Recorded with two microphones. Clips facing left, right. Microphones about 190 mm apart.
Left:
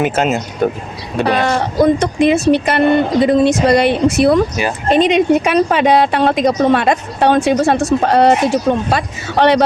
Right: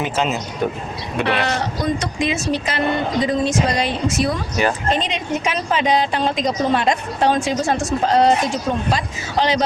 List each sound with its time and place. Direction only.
0.0 s speech: 50° left (ahead or behind)
1.2 s speech: 40° left (ahead or behind)
1.5 s a woman's voice: 55° left (ahead or behind)